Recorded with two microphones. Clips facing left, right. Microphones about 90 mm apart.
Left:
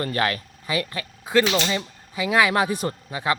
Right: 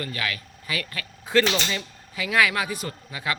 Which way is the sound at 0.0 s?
40° left (ahead or behind).